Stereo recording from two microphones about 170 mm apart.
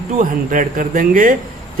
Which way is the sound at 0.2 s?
55° right (ahead or behind).